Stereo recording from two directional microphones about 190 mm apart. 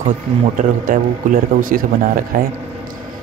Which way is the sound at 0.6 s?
45° right (ahead or behind).